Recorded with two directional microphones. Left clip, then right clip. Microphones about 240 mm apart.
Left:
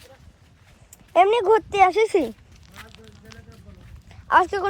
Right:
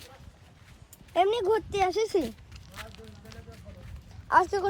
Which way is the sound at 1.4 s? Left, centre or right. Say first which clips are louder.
Left 9 dB; left.